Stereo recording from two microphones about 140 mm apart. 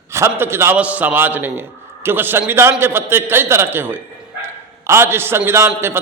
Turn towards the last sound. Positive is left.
turn(degrees=-20)  # may be behind; listen again after turning